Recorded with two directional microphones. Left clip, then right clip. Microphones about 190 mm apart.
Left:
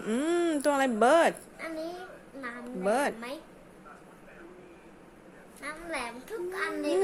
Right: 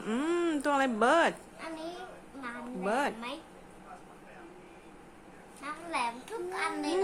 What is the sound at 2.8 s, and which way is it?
Speech, 10° left (ahead or behind).